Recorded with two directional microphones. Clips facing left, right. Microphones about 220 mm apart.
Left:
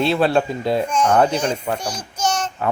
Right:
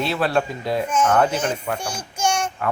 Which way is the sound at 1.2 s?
5° right (ahead or behind).